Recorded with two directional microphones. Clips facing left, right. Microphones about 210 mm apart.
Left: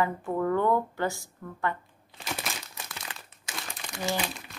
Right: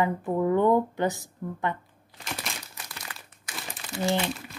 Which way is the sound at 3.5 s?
25° left (ahead or behind).